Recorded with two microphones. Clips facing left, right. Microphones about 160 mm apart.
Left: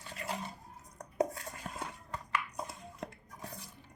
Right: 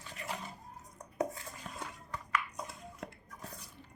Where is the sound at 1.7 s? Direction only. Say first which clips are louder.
Left 3 dB; 45° left (ahead or behind).